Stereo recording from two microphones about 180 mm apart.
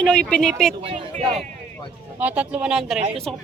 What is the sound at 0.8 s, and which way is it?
Speech, 35° right (ahead or behind).